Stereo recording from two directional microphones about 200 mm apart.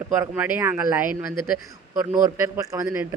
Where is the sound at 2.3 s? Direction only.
15° right (ahead or behind).